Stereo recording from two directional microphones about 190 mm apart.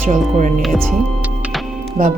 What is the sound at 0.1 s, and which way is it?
Speech, 40° right (ahead or behind).